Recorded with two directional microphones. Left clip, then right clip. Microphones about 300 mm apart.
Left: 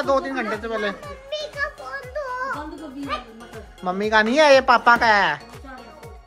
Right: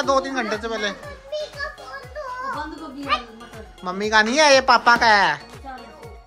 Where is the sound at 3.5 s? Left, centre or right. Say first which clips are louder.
Left 3 dB; centre.